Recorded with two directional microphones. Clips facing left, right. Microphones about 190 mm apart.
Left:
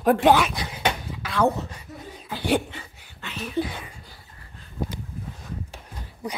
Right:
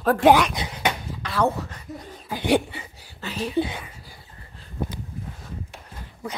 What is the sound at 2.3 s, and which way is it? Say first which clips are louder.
Speech: right 3 dB; 15° right (ahead or behind).